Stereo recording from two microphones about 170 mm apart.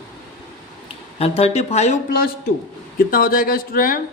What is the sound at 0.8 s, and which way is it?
Speech, 35° left (ahead or behind).